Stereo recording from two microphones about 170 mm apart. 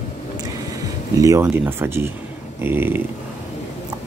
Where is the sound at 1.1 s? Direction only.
20° right (ahead or behind).